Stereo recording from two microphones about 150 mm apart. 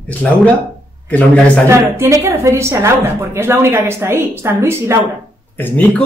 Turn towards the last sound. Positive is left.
turn(degrees=10)  # may be behind; listen again after turning